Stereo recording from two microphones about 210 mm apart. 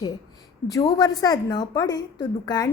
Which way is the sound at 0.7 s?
15° left (ahead or behind).